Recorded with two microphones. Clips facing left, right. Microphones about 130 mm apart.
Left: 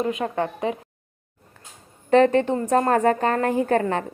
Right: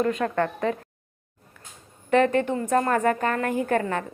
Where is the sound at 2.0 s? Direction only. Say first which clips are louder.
Left 4 dB; 30° left (ahead or behind).